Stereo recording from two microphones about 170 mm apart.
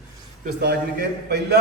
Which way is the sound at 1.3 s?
75° right (ahead or behind).